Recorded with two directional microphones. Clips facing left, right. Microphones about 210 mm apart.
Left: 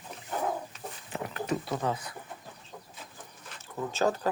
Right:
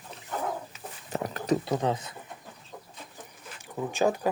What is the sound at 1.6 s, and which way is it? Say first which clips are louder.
Speech: right 4 dB; 25° right (ahead or behind).